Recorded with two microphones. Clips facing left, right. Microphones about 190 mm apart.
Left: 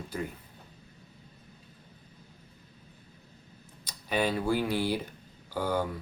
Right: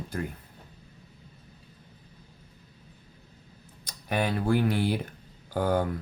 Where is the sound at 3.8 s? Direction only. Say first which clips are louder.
Even; 55° right (ahead or behind).